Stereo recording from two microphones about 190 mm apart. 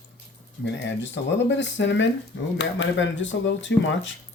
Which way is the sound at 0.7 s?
65° left (ahead or behind).